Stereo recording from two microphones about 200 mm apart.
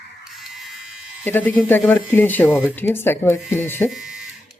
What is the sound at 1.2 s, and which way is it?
Speech, 10° left (ahead or behind).